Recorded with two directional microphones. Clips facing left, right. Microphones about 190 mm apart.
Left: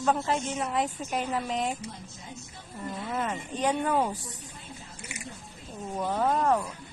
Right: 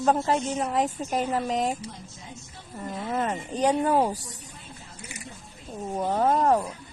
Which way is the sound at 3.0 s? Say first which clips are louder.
Right 4 dB; 40° right (ahead or behind).